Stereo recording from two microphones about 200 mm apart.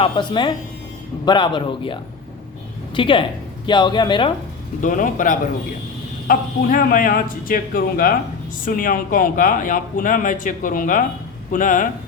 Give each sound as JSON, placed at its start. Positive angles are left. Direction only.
{"t": 0.0, "sound": "speech", "side_deg": 25}
{"t": 4.8, "sound": "a man's voice", "side_deg": 40}